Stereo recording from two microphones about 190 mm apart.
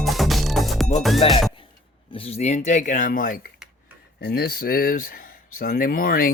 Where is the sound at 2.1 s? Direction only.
30° left (ahead or behind); by 6.3 s 50° left (ahead or behind).